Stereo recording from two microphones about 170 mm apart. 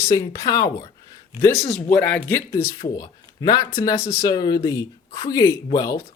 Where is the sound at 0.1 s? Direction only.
20° left (ahead or behind).